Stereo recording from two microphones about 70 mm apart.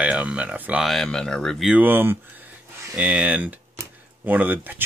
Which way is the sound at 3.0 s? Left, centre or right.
Right.